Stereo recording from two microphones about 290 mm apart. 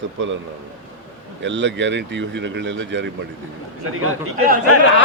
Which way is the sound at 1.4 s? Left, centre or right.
Right.